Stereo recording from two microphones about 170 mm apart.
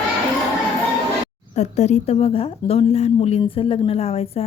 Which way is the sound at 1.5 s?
40° left (ahead or behind).